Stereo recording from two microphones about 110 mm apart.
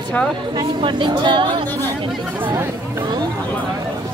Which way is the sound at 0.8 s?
45° right (ahead or behind).